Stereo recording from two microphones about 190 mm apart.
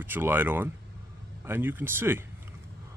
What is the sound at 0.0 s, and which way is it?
Speech, 10° right (ahead or behind).